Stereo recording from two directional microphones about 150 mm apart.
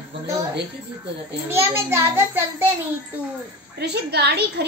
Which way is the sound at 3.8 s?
90° right.